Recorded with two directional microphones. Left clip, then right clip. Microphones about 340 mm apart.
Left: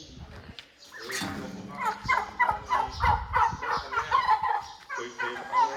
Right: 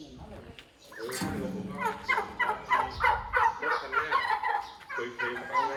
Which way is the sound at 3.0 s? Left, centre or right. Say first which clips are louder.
Left 3 dB; left.